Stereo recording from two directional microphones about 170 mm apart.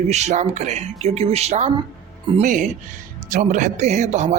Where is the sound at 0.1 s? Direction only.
40° right (ahead or behind).